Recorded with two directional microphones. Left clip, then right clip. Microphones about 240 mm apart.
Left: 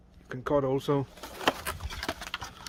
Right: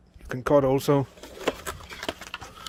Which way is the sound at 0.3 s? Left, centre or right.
Right.